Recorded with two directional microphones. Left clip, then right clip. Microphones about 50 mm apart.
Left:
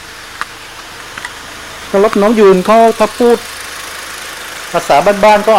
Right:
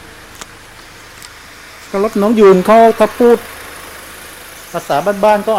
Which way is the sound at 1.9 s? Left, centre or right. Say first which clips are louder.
Left 6 dB; right.